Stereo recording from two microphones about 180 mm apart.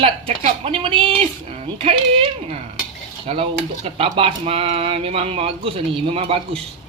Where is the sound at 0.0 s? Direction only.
30° right (ahead or behind).